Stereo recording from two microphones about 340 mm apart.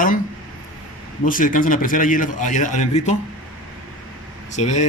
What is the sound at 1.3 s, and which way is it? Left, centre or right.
A man's voice, left.